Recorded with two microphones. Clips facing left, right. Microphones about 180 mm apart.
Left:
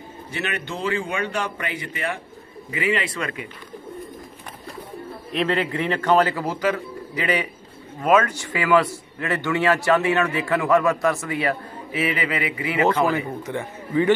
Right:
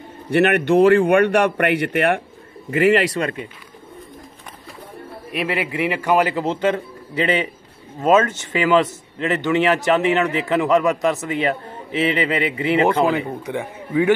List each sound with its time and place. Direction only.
0.3 s a man's voice: 65° right (ahead or behind)
2.7 s speech: 45° right (ahead or behind)
5.3 s a man's voice: 10° right (ahead or behind); by 13.0 s 25° right (ahead or behind)
13.5 s a man's voice: 10° right (ahead or behind)